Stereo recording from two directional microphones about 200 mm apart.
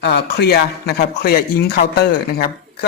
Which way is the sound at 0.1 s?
55° left (ahead or behind).